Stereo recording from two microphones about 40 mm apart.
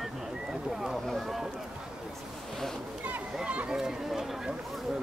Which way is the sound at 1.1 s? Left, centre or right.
Centre.